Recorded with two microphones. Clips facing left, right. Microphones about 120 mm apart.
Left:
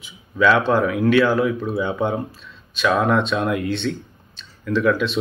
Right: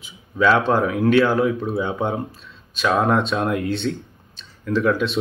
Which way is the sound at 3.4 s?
30° right (ahead or behind).